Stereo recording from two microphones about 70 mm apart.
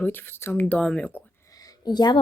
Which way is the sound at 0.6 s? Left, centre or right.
Centre.